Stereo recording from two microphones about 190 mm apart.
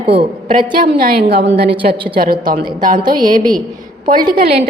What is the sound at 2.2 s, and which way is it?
A woman's voice, 50° right (ahead or behind).